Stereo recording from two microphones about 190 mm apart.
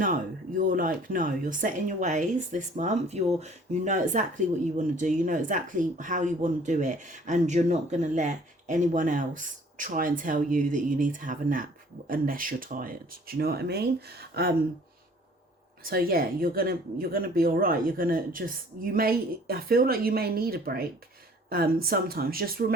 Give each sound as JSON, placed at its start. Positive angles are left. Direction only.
{"t": 0.0, "sound": "speech", "side_deg": -45}
{"t": 15.8, "sound": "speech", "side_deg": -50}